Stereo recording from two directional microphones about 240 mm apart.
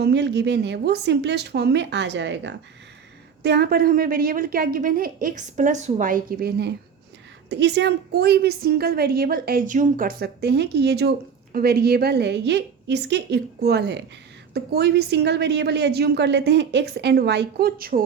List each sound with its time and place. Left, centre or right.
0.0 s a woman's voice: right